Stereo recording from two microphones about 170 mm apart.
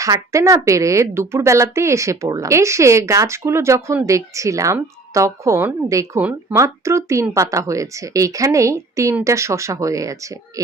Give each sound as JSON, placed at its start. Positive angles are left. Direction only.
{"t": 0.0, "sound": "speech", "side_deg": -20}